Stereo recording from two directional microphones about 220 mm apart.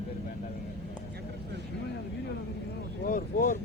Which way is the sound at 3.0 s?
40° left (ahead or behind).